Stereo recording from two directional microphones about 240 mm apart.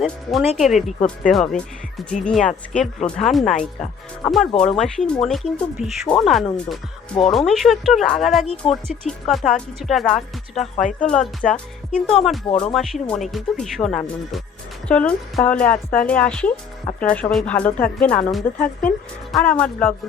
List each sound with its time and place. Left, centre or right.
0.0 s speech: centre
12.5 s speech: left
12.7 s speech: centre